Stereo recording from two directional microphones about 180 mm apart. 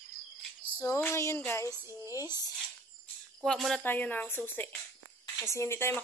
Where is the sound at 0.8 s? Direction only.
15° left (ahead or behind).